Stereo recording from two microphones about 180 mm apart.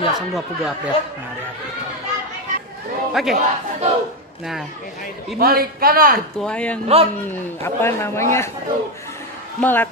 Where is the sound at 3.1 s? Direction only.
Centre (ahead or behind).